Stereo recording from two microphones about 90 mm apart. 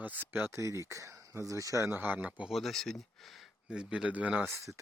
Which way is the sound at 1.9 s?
20° right (ahead or behind).